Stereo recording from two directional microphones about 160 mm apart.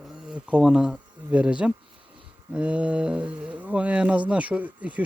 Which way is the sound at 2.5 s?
5° right (ahead or behind).